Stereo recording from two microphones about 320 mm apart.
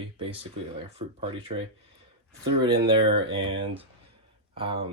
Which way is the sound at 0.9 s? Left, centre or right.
Centre.